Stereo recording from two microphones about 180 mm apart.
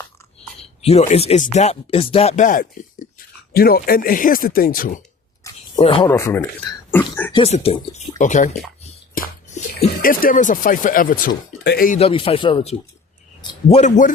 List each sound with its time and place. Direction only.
0.6 s speech: 35° left (ahead or behind); by 4.9 s 50° left (ahead or behind)
5.5 s a sound: 15° left (ahead or behind)
5.8 s speech: 30° left (ahead or behind)
6.1 s speech: 15° left (ahead or behind)
7.3 s speech: 35° left (ahead or behind)
8.2 s speech: 45° left (ahead or behind)
9.2 s bathtub: 50° left (ahead or behind)
10.0 s speech: 50° left (ahead or behind)
11.9 s speech: 30° left (ahead or behind)